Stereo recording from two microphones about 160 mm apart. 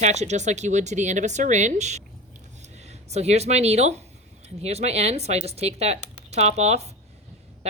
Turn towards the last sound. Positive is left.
turn(degrees=-45)  # may be behind; listen again after turning